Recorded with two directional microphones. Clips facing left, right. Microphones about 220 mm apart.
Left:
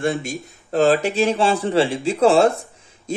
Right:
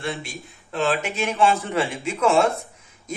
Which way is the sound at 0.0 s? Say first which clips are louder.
Left 8 dB; 45° left (ahead or behind).